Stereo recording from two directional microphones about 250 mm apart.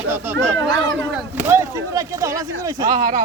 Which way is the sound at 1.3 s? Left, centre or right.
Centre.